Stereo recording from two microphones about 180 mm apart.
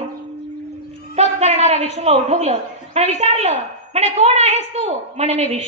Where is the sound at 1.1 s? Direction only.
40° right (ahead or behind).